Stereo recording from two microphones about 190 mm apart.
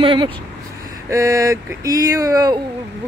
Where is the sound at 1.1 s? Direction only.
15° right (ahead or behind).